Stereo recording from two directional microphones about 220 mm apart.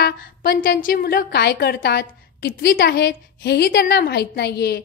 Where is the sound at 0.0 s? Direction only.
45° left (ahead or behind).